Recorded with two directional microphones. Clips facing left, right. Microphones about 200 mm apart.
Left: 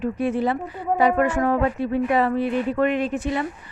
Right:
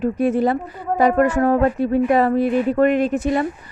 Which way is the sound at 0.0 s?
45° right (ahead or behind).